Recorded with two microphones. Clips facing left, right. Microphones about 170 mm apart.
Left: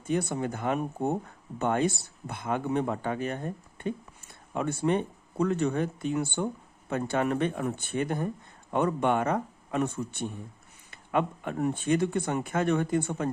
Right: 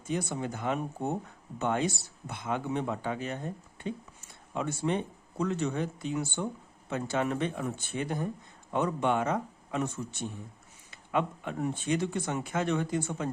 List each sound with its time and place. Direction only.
0.1 s speech: 55° left (ahead or behind)